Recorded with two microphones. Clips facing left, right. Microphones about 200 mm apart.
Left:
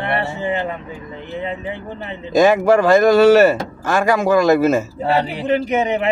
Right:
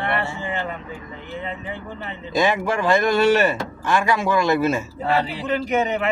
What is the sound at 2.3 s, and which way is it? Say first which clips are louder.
A man's voice: left 8 dB; 45° left (ahead or behind).